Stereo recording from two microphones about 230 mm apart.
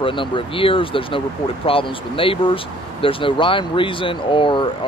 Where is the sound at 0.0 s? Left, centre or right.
Left.